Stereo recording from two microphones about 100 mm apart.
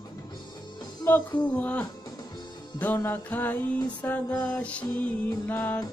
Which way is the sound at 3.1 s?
20° left (ahead or behind).